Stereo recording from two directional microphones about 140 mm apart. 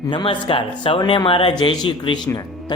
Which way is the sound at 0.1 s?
40° left (ahead or behind).